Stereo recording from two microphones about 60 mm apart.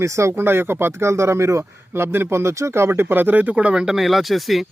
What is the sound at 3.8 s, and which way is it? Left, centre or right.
Speech, centre.